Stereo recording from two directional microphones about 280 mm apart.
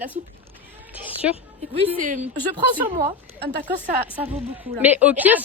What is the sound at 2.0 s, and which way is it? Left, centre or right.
Speech, right.